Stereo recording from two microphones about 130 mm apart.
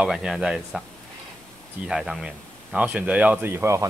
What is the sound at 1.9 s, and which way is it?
Speech, 5° right (ahead or behind).